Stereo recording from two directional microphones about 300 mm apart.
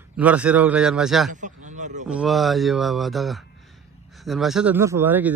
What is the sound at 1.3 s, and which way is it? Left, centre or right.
Speech, right.